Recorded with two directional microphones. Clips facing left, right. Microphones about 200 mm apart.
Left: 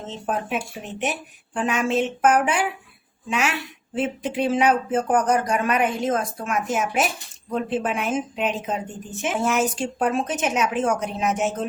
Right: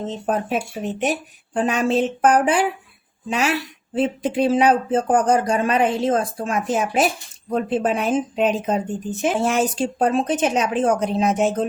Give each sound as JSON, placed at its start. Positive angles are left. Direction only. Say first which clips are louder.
{"t": 0.3, "sound": "speech", "louder": "right 3 dB", "side_deg": -40}